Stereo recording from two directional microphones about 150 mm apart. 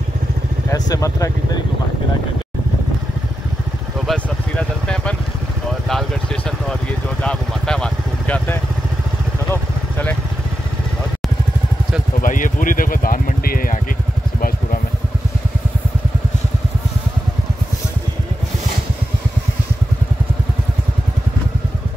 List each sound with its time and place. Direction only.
0.7 s speech: 25° left (ahead or behind)
4.1 s vehicle: 5° left (ahead or behind)
5.9 s speech: centre (ahead or behind)
9.5 s vehicle: 10° left (ahead or behind)
12.2 s speech: 60° left (ahead or behind)